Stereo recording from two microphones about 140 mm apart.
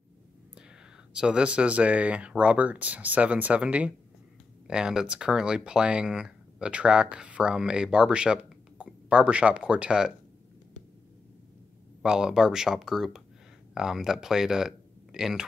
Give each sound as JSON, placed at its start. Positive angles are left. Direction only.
{"t": 1.1, "sound": "speech", "side_deg": -5}
{"t": 12.0, "sound": "speech", "side_deg": -5}